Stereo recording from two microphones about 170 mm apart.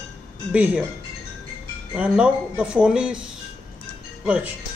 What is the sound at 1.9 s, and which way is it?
Speech, 5° right (ahead or behind).